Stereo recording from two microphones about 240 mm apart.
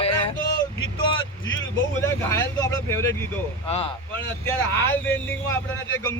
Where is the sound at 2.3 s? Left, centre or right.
Centre.